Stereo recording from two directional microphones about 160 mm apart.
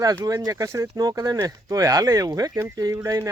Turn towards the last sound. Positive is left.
turn(degrees=-20)  # may be behind; listen again after turning